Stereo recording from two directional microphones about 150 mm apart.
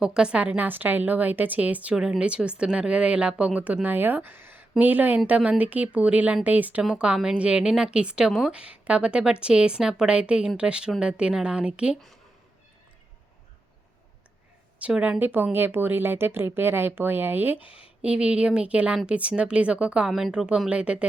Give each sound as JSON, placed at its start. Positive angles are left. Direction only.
{"t": 0.0, "sound": "speech", "side_deg": -5}
{"t": 14.8, "sound": "speech", "side_deg": -10}